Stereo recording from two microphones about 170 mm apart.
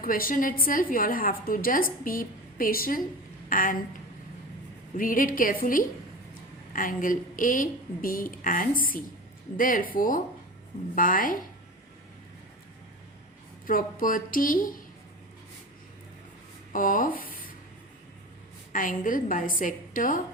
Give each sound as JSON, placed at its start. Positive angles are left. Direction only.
{"t": 0.0, "sound": "a woman's voice", "side_deg": 55}
{"t": 4.9, "sound": "a woman's voice", "side_deg": 55}
{"t": 13.7, "sound": "a woman's voice", "side_deg": 55}
{"t": 16.7, "sound": "speech", "side_deg": 50}
{"t": 18.7, "sound": "a woman's voice", "side_deg": 50}